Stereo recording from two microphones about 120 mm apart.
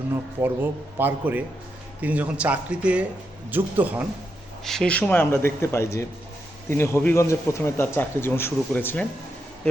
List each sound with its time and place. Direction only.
0.1 s a man's voice: 15° right (ahead or behind)
4.6 s a man's voice: 5° left (ahead or behind)